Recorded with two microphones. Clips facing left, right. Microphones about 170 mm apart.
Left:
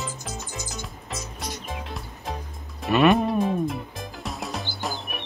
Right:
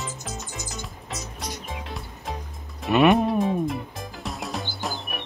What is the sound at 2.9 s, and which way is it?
Speech, 20° right (ahead or behind).